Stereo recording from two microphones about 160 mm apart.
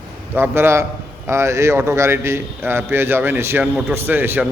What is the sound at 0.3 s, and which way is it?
A man's voice, 15° right (ahead or behind).